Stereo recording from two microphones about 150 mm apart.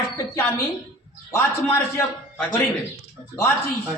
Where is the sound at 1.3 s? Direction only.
20° left (ahead or behind).